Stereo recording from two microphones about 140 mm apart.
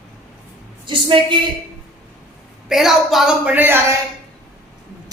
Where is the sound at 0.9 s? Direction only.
35° right (ahead or behind).